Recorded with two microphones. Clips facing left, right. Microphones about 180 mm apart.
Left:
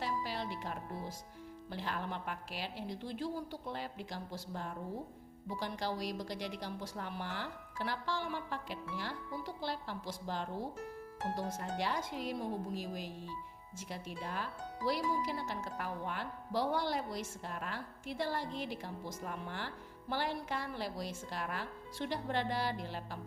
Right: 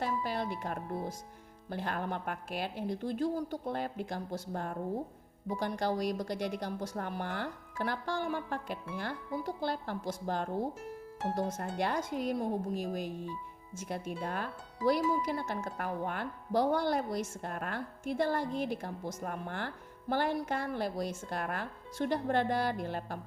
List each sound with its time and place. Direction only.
0.0 s music: 50° right (ahead or behind)
1.7 s speech: 50° right (ahead or behind)